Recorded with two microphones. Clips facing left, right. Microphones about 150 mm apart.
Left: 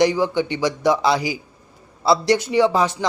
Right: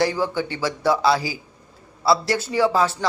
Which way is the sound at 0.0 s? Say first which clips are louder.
Left 4 dB; 15° left (ahead or behind).